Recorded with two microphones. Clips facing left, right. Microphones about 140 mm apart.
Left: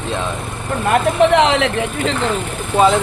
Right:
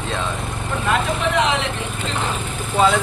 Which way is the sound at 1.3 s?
70° left (ahead or behind).